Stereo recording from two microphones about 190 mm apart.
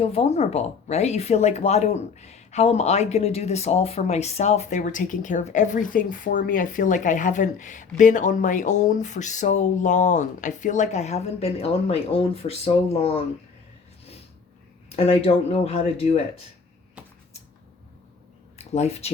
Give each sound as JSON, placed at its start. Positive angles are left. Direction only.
{"t": 0.0, "sound": "speech", "side_deg": 30}
{"t": 14.8, "sound": "speech", "side_deg": 35}
{"t": 18.5, "sound": "speech", "side_deg": 35}